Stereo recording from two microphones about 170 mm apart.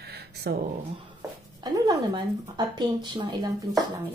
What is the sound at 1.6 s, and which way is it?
Speech, 20° right (ahead or behind).